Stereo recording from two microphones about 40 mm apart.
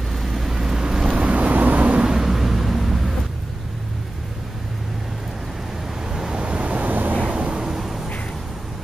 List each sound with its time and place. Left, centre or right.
0.1 s vehicle: centre; by 1.3 s right
1.3 s vehicle: right
2.0 s vehicle: centre
6.1 s vehicle: centre
6.4 s vehicle: right
7.2 s vehicle: right
7.6 s a sound: centre